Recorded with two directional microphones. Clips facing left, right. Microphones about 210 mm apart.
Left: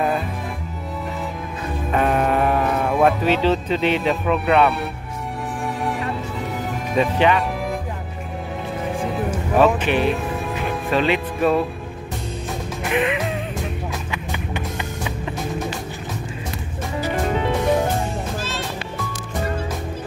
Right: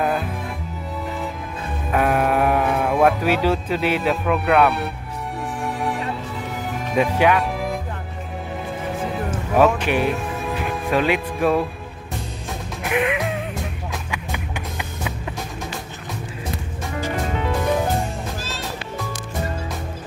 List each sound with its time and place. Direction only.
0.0 s music: centre (ahead or behind)
1.9 s speech: 5° right (ahead or behind)
6.9 s music: 5° right (ahead or behind)
9.9 s speech: 10° right (ahead or behind)
12.8 s music: 5° right (ahead or behind)
14.5 s music: 5° right (ahead or behind)